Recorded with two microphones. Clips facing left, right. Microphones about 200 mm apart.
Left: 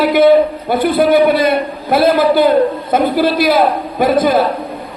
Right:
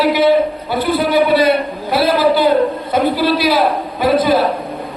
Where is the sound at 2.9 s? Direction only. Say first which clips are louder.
Left 2 dB; 50° left (ahead or behind).